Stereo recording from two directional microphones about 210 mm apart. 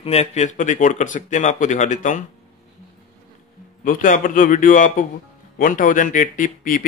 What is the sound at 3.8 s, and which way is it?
Speech, 40° left (ahead or behind).